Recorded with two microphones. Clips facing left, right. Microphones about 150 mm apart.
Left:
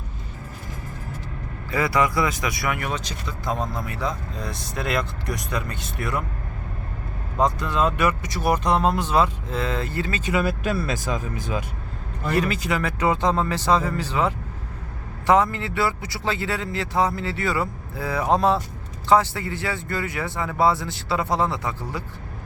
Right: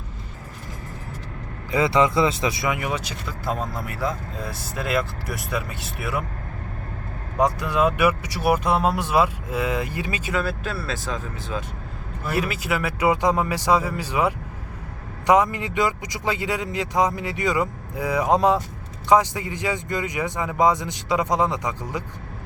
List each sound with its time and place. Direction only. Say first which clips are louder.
1.7 s speech: right 3 dB; 20° right (ahead or behind)
7.3 s speech: right 1 dB; 10° right (ahead or behind)
10.3 s speech: left 4 dB; 15° left (ahead or behind)
12.2 s speech: left 2 dB; 5° right (ahead or behind)